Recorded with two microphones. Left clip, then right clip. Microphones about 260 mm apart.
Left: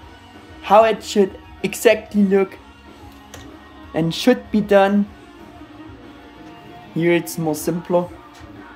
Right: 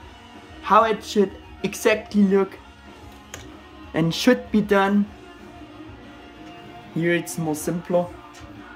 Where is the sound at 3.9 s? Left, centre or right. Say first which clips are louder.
Left 2 dB; centre.